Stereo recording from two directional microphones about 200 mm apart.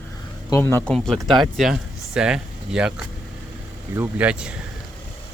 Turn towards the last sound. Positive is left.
turn(degrees=-5)  # may be behind; listen again after turning